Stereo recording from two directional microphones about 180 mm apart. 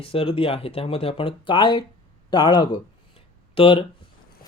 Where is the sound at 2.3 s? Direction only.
25° left (ahead or behind).